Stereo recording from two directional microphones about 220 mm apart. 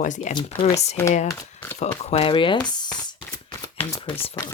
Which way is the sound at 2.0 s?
30° left (ahead or behind).